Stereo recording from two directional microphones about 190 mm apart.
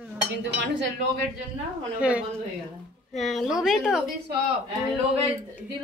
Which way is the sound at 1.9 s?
5° right (ahead or behind).